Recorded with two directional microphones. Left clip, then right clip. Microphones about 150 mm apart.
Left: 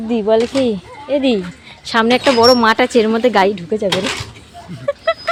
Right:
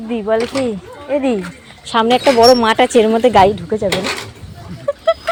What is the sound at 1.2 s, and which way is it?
Speech, 15° right (ahead or behind).